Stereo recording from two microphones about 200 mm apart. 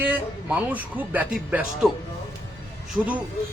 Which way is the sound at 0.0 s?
10° right (ahead or behind).